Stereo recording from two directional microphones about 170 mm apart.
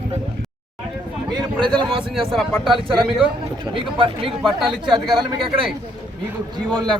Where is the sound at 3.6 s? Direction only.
30° right (ahead or behind).